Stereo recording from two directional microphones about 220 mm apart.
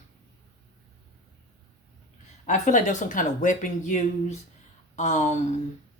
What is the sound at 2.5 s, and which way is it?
Speech, 35° left (ahead or behind).